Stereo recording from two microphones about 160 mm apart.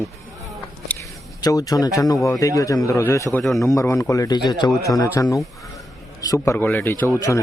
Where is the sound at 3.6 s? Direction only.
20° left (ahead or behind).